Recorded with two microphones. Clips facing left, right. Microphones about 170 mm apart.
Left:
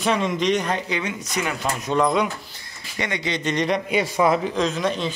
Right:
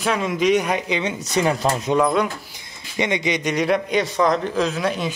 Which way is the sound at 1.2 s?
35° right (ahead or behind).